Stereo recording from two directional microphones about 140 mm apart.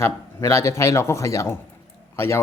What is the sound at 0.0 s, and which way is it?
Speech, 20° left (ahead or behind).